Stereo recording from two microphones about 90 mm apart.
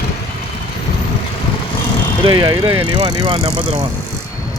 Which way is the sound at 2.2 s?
60° right (ahead or behind).